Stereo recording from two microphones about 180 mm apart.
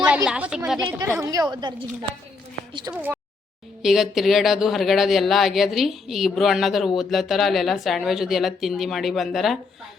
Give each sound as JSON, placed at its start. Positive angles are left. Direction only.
{"t": 0.3, "sound": "a woman's voice", "side_deg": -5}
{"t": 2.9, "sound": "speech", "side_deg": -5}